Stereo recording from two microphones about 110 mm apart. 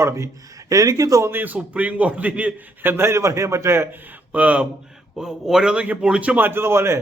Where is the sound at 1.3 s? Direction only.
15° right (ahead or behind).